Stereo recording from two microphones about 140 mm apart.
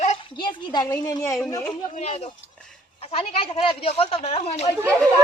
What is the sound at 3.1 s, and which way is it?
Speech, 45° left (ahead or behind).